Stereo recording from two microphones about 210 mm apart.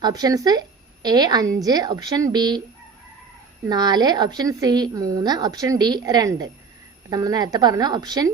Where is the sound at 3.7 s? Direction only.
20° right (ahead or behind).